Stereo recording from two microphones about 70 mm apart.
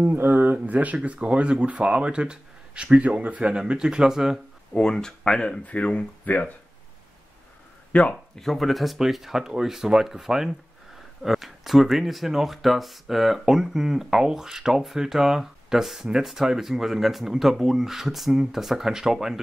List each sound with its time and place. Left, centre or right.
0.0 s speech: right; by 4.4 s centre
4.7 s speech: centre
7.9 s speech: centre
8.4 s speech: centre